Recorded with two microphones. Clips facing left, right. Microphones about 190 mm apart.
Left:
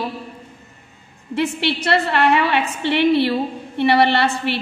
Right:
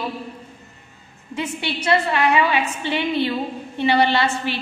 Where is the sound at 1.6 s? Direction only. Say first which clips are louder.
Right 3 dB; 65° left (ahead or behind).